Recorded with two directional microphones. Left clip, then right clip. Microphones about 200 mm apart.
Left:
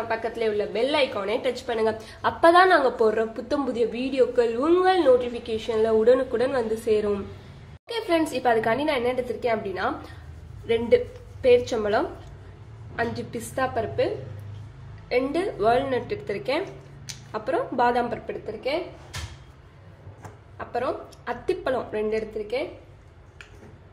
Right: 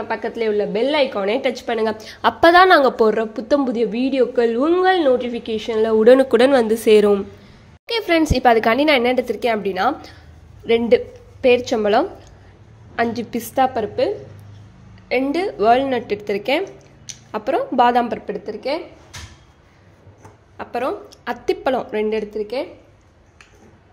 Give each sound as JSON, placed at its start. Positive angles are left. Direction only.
{"t": 0.1, "sound": "a woman's voice", "side_deg": -40}
{"t": 11.4, "sound": "a woman's voice", "side_deg": -40}
{"t": 20.5, "sound": "a woman's voice", "side_deg": -55}